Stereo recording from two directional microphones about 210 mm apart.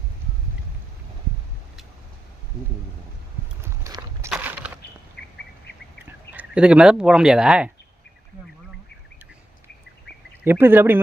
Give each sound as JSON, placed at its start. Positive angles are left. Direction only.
{"t": 3.6, "sound": "walk", "side_deg": -15}
{"t": 4.3, "sound": "a sound", "side_deg": -5}
{"t": 5.2, "sound": "bird", "side_deg": 55}
{"t": 6.1, "sound": "speech", "side_deg": -5}
{"t": 10.4, "sound": "speech", "side_deg": -10}